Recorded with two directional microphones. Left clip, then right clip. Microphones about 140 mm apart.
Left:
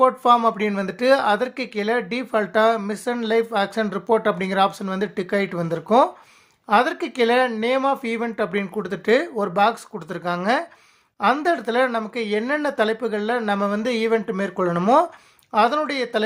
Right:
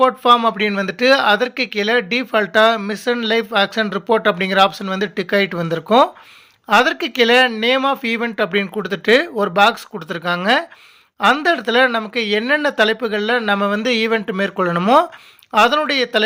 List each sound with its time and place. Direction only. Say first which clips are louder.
0.0 s speech: right 3 dB; 15° right (ahead or behind)